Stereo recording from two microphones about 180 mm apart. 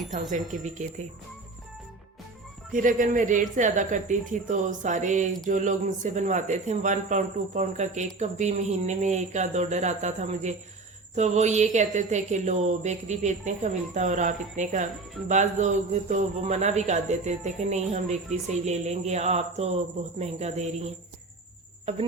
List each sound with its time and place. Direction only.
0.1 s speech: 45° right (ahead or behind)
2.7 s speech: 45° right (ahead or behind)